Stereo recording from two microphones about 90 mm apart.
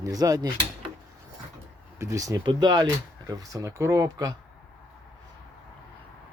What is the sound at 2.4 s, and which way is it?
Speech, 55° right (ahead or behind).